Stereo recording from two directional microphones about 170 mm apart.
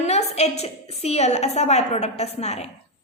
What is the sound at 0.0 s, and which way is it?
A woman's voice, 40° left (ahead or behind).